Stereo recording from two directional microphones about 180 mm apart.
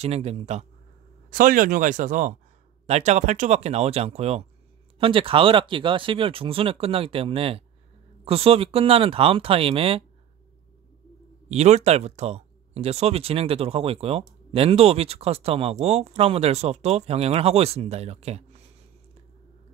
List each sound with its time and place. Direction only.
0.0 s speech: 35° right (ahead or behind)
1.3 s speech: 50° right (ahead or behind); by 10.0 s 30° right (ahead or behind)
11.4 s speech: 35° right (ahead or behind)